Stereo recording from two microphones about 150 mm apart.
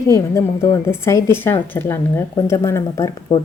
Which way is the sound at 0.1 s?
20° left (ahead or behind).